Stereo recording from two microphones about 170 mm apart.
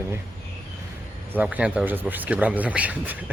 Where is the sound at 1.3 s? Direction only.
10° right (ahead or behind).